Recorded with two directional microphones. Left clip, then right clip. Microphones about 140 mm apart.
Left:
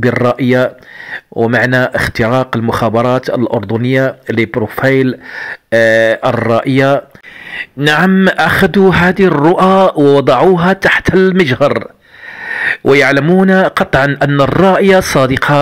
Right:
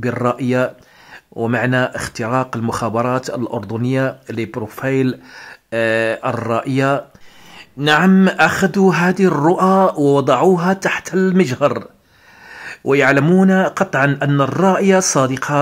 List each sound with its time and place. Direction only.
0.0 s speech: 25° left (ahead or behind)
7.5 s speech: 35° left (ahead or behind)
8.7 s speech: 25° left (ahead or behind)